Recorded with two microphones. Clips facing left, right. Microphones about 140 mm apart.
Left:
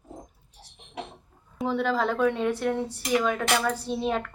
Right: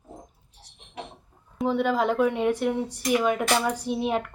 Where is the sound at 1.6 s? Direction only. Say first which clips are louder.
Right 2 dB; 10° right (ahead or behind).